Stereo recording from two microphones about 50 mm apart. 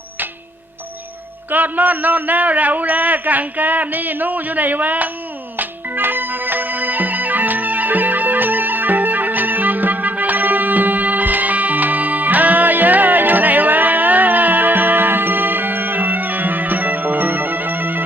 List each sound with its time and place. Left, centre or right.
1.5 s a man's voice: right
5.5 s music: right